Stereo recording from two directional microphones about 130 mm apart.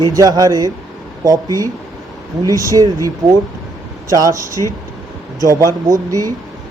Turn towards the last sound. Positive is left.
turn(degrees=-25)  # may be behind; listen again after turning